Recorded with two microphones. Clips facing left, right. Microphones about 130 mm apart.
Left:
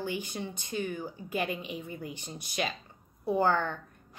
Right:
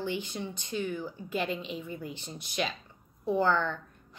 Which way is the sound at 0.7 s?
45° left (ahead or behind).